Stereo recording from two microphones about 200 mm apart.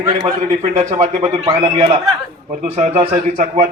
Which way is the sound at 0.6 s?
35° right (ahead or behind).